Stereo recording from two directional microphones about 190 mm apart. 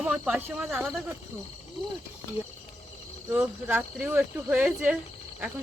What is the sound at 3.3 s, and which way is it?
Speech, 10° right (ahead or behind).